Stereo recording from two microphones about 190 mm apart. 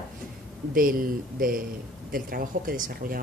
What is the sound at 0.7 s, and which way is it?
Speech, 50° right (ahead or behind).